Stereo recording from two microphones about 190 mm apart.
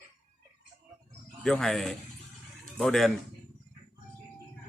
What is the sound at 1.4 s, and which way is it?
Speech, 5° left (ahead or behind).